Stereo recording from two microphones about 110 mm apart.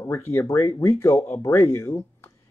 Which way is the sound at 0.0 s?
25° left (ahead or behind).